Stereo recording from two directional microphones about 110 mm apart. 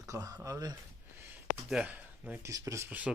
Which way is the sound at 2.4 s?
30° right (ahead or behind).